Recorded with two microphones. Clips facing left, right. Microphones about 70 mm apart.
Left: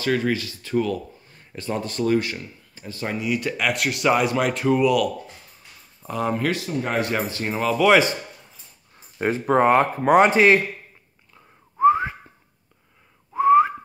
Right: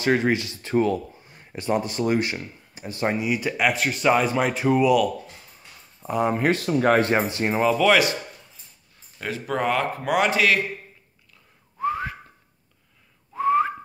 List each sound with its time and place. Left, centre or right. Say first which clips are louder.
0.0 s speech: right 1 dB; right
1.2 s a sound: right 3 dB; centre
2.0 s speech: left 1 dB; right
3.3 s speech: right 1 dB; centre
6.0 s speech: right 2 dB; centre
6.6 s speech: right 6 dB; right
7.0 s speech: right 3 dB; right
9.2 s speech: left 7 dB; left
11.8 s whistling: left 9 dB; left
13.4 s whistling: left 5 dB; centre